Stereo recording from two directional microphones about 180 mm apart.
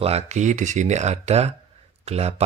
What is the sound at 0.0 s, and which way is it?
Speech, 35° right (ahead or behind).